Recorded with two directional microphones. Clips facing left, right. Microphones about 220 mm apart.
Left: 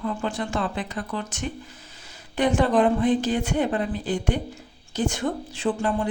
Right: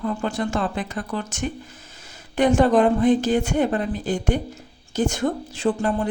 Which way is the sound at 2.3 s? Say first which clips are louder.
Right 4 dB; 45° right (ahead or behind).